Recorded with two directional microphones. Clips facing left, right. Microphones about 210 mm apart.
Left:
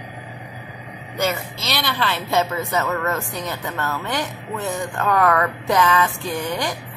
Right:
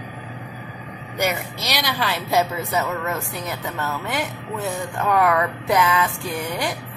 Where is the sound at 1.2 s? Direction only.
15° right (ahead or behind).